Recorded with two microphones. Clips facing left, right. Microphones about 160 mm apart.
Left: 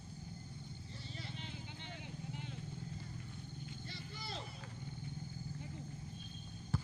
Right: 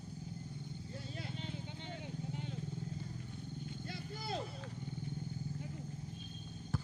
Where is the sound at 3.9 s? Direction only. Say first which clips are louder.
Right 8 dB; 50° right (ahead or behind).